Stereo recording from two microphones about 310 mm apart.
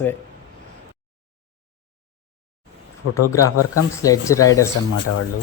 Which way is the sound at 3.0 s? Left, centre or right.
Left.